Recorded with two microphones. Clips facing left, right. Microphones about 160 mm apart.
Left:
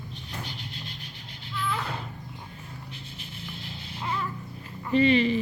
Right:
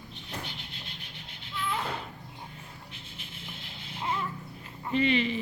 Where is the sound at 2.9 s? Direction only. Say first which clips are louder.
Left 4 dB; 35° left (ahead or behind).